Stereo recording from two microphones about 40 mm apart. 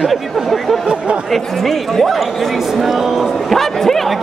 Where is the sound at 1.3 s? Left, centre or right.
Centre.